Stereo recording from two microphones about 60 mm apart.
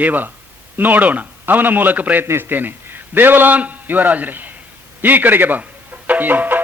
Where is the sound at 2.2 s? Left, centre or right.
Right.